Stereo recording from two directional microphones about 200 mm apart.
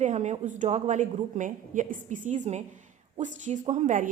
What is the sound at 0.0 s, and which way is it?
Speech, 35° right (ahead or behind).